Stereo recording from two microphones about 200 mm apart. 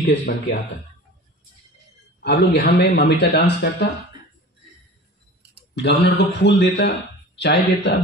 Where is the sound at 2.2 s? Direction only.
55° left (ahead or behind).